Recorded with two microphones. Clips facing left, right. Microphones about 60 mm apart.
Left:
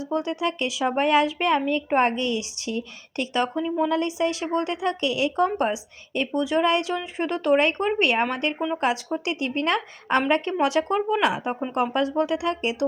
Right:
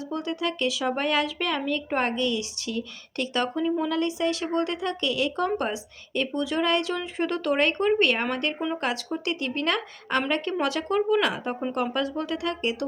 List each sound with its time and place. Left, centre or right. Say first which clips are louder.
0.1 s a woman's voice: left 4 dB; left